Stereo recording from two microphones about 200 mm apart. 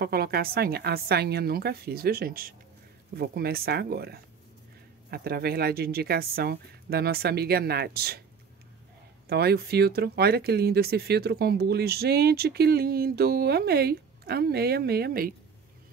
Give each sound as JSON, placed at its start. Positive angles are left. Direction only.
{"t": 0.0, "sound": "speech", "side_deg": -50}
{"t": 9.3, "sound": "speech", "side_deg": -50}